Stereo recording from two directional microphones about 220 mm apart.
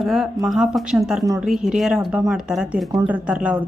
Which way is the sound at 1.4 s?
Centre (ahead or behind).